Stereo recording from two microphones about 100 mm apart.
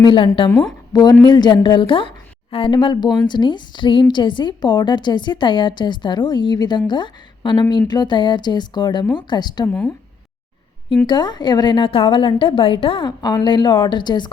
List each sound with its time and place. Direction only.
0.0 s a woman's voice: 60° left (ahead or behind)
1.2 s a woman's voice: 50° left (ahead or behind)
9.6 s speech: 15° left (ahead or behind)
11.0 s a woman's voice: 50° left (ahead or behind)
11.9 s a woman's voice: 60° left (ahead or behind)
13.1 s a woman's voice: 45° left (ahead or behind)